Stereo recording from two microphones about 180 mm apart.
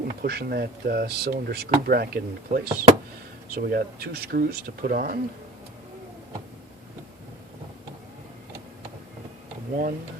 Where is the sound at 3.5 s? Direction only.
55° right (ahead or behind).